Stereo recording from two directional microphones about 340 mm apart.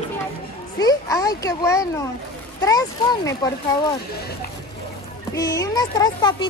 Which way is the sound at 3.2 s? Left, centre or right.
Centre.